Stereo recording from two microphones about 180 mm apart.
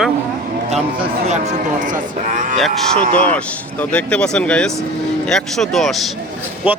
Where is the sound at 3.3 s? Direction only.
5° left (ahead or behind).